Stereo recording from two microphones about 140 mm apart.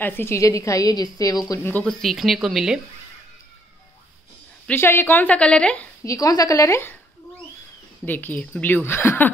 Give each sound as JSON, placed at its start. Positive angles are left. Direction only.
{"t": 0.0, "sound": "a woman's voice", "side_deg": 15}
{"t": 1.5, "sound": "a woman's voice", "side_deg": 15}
{"t": 1.9, "sound": "speech", "side_deg": 0}
{"t": 4.6, "sound": "a woman's voice", "side_deg": 15}
{"t": 6.0, "sound": "a woman's voice", "side_deg": 25}
{"t": 8.0, "sound": "a woman's voice", "side_deg": 15}